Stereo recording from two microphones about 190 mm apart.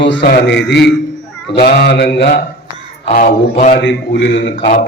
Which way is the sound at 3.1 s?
40° left (ahead or behind).